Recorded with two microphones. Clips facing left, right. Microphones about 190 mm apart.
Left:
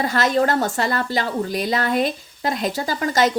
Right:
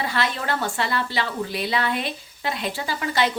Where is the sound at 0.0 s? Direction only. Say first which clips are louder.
Left 7 dB; 45° left (ahead or behind).